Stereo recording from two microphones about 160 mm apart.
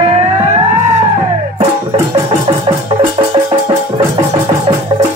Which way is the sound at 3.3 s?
30° right (ahead or behind).